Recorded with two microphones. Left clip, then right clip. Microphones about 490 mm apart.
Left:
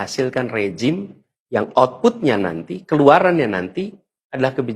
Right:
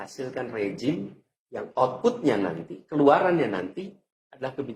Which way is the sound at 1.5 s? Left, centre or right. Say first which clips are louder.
Left 10 dB; left.